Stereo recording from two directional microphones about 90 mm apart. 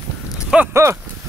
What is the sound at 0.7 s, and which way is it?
Speech, 30° right (ahead or behind).